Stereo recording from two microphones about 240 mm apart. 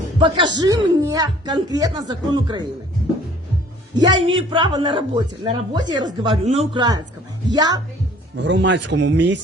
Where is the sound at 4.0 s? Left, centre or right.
Centre.